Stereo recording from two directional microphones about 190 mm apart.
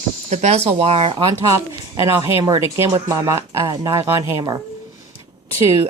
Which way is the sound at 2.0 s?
20° right (ahead or behind).